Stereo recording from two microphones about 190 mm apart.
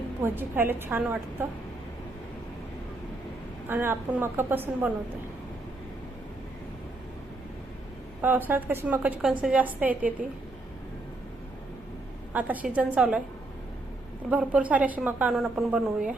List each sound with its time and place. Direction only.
0.2 s a woman's voice: 10° right (ahead or behind)
3.7 s a woman's voice: 10° right (ahead or behind)
8.2 s a woman's voice: 10° right (ahead or behind)
12.3 s a woman's voice: 10° right (ahead or behind)
14.3 s a woman's voice: 5° right (ahead or behind)